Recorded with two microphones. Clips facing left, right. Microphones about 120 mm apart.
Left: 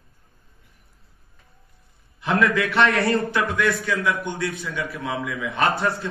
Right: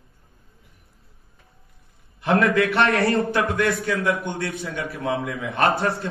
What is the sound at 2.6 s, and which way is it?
A man's voice, 30° right (ahead or behind).